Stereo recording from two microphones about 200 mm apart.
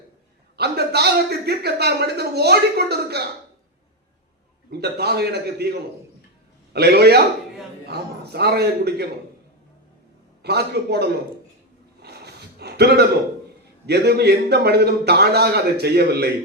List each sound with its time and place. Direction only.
0.5 s a man's voice: 55° right (ahead or behind)
4.7 s a man's voice: 55° right (ahead or behind)
6.7 s a man's voice: 55° right (ahead or behind)
10.4 s a man's voice: 55° right (ahead or behind)
12.0 s a sound: 55° right (ahead or behind)
13.8 s a man's voice: 55° right (ahead or behind)